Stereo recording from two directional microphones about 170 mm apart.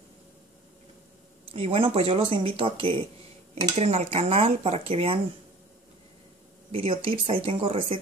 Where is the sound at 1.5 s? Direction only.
35° right (ahead or behind).